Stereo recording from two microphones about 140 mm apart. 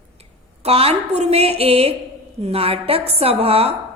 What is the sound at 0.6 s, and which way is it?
A woman's voice, 45° right (ahead or behind).